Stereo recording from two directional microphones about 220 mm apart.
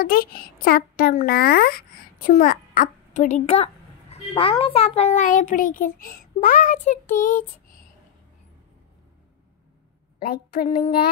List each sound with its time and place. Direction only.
0.0 s a child's voice: 40° left (ahead or behind)
10.1 s a woman's voice: 45° left (ahead or behind)